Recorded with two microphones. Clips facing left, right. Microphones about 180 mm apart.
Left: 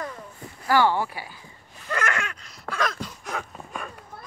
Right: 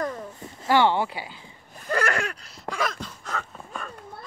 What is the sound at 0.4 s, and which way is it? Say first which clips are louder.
Speech: even; 25° right (ahead or behind).